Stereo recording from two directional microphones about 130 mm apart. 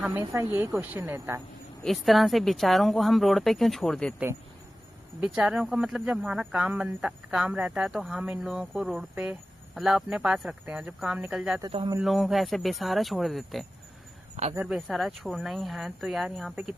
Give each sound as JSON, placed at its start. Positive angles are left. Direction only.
{"t": 0.0, "sound": "speech", "side_deg": -15}
{"t": 1.8, "sound": "speech", "side_deg": 0}
{"t": 5.2, "sound": "speech", "side_deg": -5}
{"t": 14.4, "sound": "speech", "side_deg": -60}
{"t": 14.7, "sound": "speech", "side_deg": 0}